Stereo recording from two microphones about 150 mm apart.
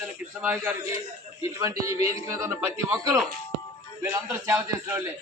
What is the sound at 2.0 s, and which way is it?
Music, 45° left (ahead or behind).